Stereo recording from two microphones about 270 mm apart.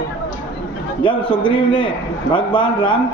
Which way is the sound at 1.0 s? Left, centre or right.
Centre.